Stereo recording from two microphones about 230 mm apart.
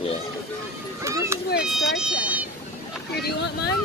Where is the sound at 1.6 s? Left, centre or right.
Centre.